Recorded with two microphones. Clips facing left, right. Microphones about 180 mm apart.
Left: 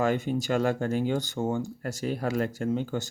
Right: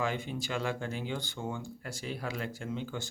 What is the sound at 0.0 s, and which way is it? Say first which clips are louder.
Speech: left 8 dB; 45° left (ahead or behind).